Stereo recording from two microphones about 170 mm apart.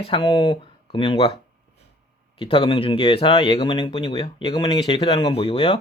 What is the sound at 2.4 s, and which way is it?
Speech, 30° left (ahead or behind).